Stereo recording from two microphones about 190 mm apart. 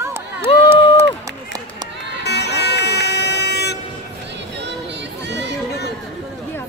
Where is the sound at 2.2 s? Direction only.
60° left (ahead or behind).